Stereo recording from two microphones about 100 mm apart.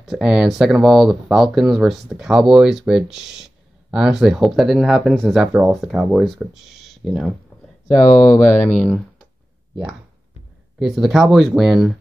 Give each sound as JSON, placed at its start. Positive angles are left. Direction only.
{"t": 0.0, "sound": "speech", "side_deg": -5}
{"t": 5.4, "sound": "speech", "side_deg": -10}
{"t": 8.2, "sound": "speech", "side_deg": 35}
{"t": 8.6, "sound": "speech", "side_deg": 5}
{"t": 10.8, "sound": "speech", "side_deg": -5}